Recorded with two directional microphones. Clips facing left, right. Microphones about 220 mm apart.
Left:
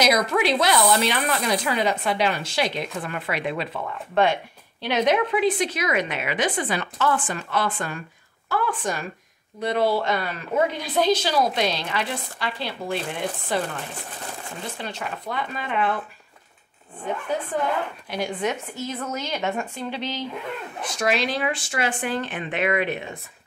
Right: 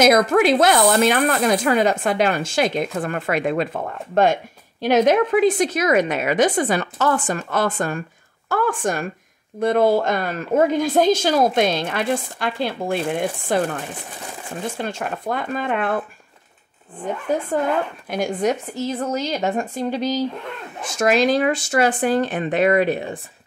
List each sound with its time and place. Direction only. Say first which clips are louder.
0.0 s speech: right 6 dB; 50° right (ahead or behind)
14.8 s speech: right 6 dB; 50° right (ahead or behind)
17.5 s speech: right 4 dB; 50° right (ahead or behind)